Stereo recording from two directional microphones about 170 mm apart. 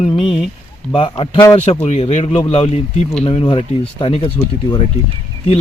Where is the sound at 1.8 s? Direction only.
40° left (ahead or behind).